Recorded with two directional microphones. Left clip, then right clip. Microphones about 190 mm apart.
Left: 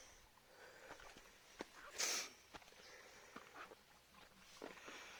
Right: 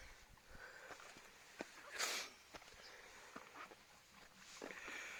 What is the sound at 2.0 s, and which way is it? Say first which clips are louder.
Sneeze: even; 20° left (ahead or behind).